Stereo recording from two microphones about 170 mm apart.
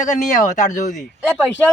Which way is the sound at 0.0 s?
45° left (ahead or behind).